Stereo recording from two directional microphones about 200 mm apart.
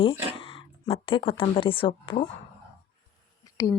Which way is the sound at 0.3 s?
25° left (ahead or behind).